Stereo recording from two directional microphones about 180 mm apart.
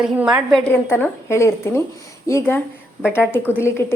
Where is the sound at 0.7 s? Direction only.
10° left (ahead or behind).